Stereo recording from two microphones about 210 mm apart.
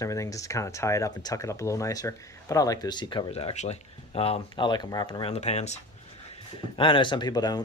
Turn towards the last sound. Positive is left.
turn(degrees=20)  # may be behind; listen again after turning